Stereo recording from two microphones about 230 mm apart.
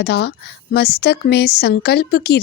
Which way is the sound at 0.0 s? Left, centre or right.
Left.